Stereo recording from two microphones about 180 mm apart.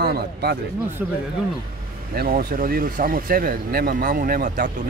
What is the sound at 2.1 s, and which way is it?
Speech, 55° right (ahead or behind).